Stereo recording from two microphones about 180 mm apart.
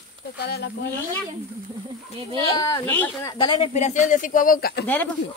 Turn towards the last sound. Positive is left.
turn(degrees=55)  # may be behind; listen again after turning